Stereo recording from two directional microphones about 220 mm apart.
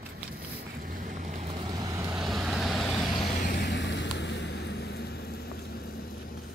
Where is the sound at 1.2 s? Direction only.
30° right (ahead or behind).